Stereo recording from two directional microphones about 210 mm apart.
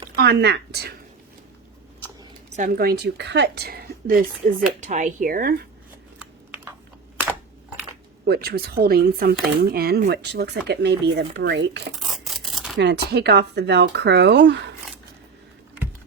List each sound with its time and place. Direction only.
0.2 s a woman's voice: 50° right (ahead or behind)
2.6 s a woman's voice: 45° right (ahead or behind)
6.1 s a sound: 5° right (ahead or behind)
8.3 s a woman's voice: 45° right (ahead or behind)
11.9 s a sound: centre (ahead or behind)
12.8 s a woman's voice: 50° right (ahead or behind)